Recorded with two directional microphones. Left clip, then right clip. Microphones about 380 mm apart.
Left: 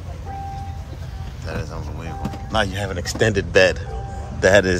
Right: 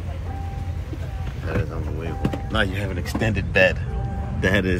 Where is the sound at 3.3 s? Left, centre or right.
Centre.